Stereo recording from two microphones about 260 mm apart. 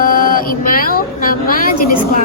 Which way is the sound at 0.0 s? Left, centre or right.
Left.